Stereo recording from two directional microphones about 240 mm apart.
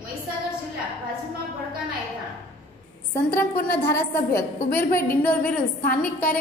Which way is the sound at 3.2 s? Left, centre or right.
Centre.